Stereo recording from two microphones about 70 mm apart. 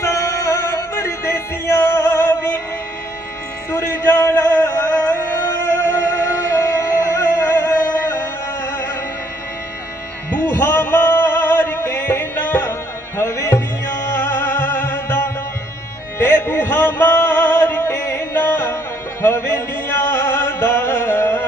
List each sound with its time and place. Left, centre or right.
0.0 s music: left
3.7 s music: left
5.9 s music: left
6.7 s music: left
10.3 s a sound: left
13.1 s music: left
14.2 s music: left